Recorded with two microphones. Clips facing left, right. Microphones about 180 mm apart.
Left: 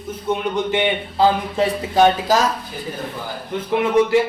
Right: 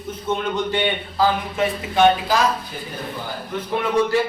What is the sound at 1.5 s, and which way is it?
Speech, 35° left (ahead or behind).